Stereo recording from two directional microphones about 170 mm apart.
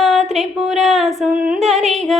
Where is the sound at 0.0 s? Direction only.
Centre (ahead or behind).